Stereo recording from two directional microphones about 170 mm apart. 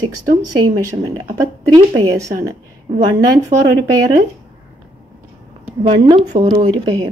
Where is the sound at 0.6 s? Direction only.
20° right (ahead or behind).